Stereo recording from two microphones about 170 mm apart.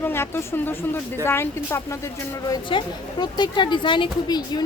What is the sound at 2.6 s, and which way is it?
Speech, 30° left (ahead or behind).